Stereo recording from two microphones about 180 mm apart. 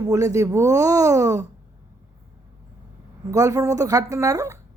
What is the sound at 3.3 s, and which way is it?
Speech, 20° right (ahead or behind).